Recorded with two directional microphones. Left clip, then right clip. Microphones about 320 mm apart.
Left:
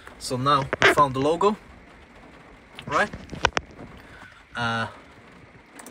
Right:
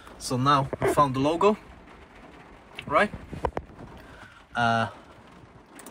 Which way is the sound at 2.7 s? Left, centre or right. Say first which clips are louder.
Right 1 dB; centre.